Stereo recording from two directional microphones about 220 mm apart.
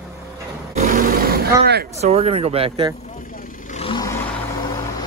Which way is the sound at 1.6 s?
50° right (ahead or behind).